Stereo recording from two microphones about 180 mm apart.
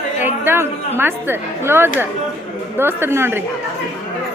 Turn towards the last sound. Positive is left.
turn(degrees=-10)  # may be behind; listen again after turning